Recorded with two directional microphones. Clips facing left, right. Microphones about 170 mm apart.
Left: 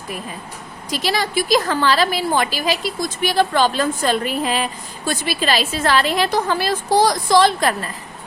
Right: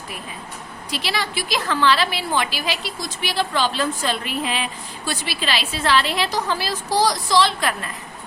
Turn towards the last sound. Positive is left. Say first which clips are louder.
# left 5 dB
turn(degrees=40)  # may be behind; listen again after turning